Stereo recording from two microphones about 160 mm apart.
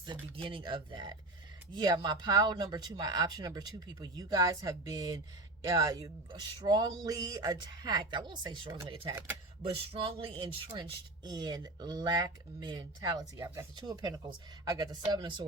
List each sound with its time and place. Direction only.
0.4 s speech: 30° right (ahead or behind)
9.9 s speech: 35° right (ahead or behind)